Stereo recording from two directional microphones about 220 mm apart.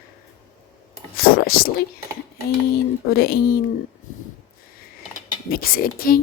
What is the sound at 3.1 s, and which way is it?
Speech, 45° left (ahead or behind).